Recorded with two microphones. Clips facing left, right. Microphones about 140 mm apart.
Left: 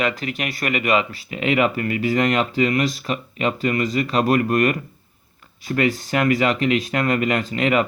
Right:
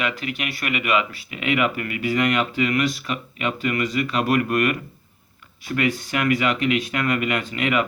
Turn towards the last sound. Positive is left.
turn(degrees=35)  # may be behind; listen again after turning